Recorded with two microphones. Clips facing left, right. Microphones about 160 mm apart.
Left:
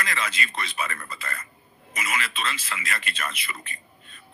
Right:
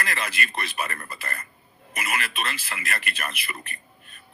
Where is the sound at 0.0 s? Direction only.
60° right (ahead or behind).